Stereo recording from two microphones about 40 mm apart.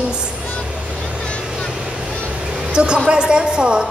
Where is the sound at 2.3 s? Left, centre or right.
Right.